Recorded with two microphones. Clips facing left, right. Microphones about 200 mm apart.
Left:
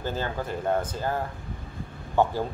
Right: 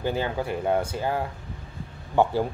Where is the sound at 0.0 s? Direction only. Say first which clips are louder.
Right 3 dB; 15° right (ahead or behind).